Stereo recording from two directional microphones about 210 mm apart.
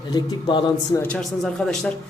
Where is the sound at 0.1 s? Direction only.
20° left (ahead or behind).